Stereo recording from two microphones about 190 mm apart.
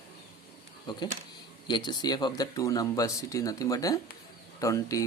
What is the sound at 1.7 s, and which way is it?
Speech, 25° left (ahead or behind).